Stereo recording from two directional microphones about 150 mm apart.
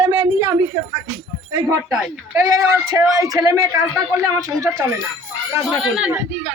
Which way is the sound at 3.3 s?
20° right (ahead or behind).